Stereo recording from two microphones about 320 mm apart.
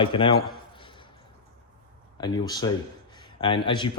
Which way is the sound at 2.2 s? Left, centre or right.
Centre.